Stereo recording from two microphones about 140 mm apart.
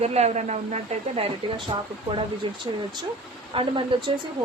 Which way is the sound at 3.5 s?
40° right (ahead or behind).